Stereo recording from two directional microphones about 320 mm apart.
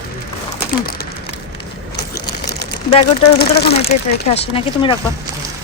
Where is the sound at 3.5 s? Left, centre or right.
Centre.